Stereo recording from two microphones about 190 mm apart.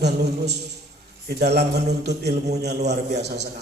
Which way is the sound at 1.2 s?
60° right (ahead or behind).